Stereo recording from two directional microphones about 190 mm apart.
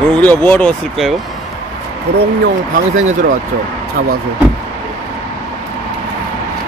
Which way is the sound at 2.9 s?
90° right.